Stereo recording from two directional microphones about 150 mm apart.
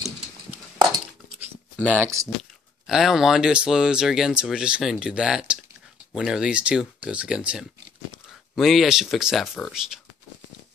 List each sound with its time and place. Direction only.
0.5 s a sound: 10° right (ahead or behind)
1.8 s speech: 10° right (ahead or behind)
2.9 s speech: centre (ahead or behind)